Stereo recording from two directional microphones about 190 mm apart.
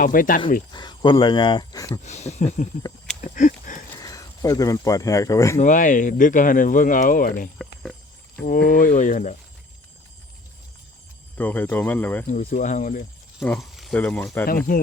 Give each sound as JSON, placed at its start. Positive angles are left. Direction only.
{"t": 0.0, "sound": "speech", "side_deg": 45}
{"t": 0.7, "sound": "speech", "side_deg": 20}
{"t": 2.0, "sound": "speech", "side_deg": 35}
{"t": 3.2, "sound": "a sound", "side_deg": 40}
{"t": 4.0, "sound": "speech", "side_deg": 20}
{"t": 5.5, "sound": "speech", "side_deg": 45}
{"t": 7.6, "sound": "a sound", "side_deg": 0}
{"t": 8.7, "sound": "speech", "side_deg": 45}
{"t": 11.3, "sound": "speech", "side_deg": 10}
{"t": 12.3, "sound": "speech", "side_deg": 40}
{"t": 13.4, "sound": "speech", "side_deg": 5}